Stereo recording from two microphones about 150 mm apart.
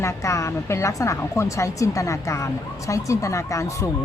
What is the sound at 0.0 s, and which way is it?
A woman's voice, 20° left (ahead or behind).